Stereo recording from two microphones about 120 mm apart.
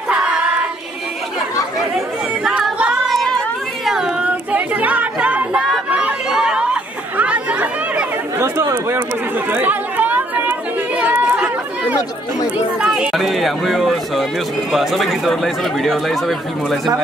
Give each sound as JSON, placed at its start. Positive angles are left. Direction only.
{"t": 0.1, "sound": "singing", "side_deg": -10}
{"t": 2.4, "sound": "a sound", "side_deg": -5}
{"t": 5.9, "sound": "chatter", "side_deg": -10}
{"t": 8.4, "sound": "chatter", "side_deg": -20}
{"t": 12.8, "sound": "speech", "side_deg": -5}